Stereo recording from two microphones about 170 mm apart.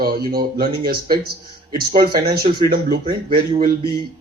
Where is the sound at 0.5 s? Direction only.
60° right (ahead or behind).